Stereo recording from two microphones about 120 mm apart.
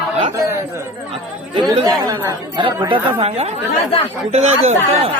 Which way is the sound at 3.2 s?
60° right (ahead or behind).